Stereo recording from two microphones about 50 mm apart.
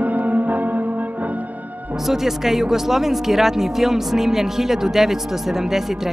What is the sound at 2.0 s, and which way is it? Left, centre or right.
Speech, centre.